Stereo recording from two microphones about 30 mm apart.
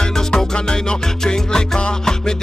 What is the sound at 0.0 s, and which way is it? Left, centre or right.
Music, left.